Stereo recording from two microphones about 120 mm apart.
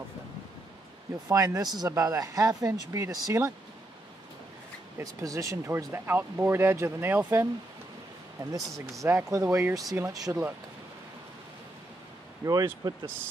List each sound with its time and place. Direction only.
1.3 s speech: 30° right (ahead or behind)
5.0 s speech: 30° right (ahead or behind)
8.4 s speech: 30° right (ahead or behind)
12.4 s speech: 30° right (ahead or behind)